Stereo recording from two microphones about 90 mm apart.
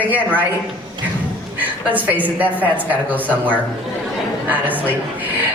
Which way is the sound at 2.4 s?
20° right (ahead or behind).